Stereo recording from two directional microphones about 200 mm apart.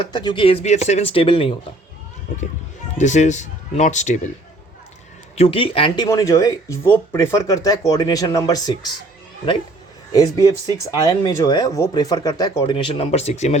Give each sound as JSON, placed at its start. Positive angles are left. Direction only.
{"t": 0.0, "sound": "speech", "side_deg": 20}
{"t": 3.0, "sound": "speech", "side_deg": 35}
{"t": 5.4, "sound": "speech", "side_deg": 25}
{"t": 10.1, "sound": "speech", "side_deg": 15}